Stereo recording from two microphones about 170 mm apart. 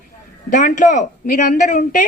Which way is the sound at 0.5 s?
50° left (ahead or behind).